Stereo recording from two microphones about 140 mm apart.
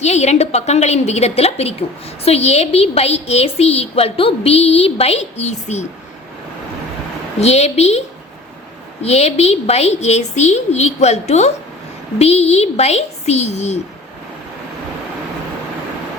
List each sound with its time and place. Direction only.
0.0 s a woman's voice: 55° left (ahead or behind)
7.3 s a woman's voice: 50° left (ahead or behind)